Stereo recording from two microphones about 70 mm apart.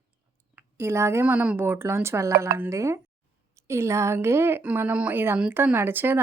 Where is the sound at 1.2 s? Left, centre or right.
Right.